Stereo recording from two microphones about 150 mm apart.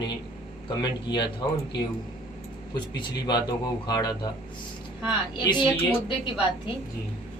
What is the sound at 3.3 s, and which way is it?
A man's voice, 30° left (ahead or behind).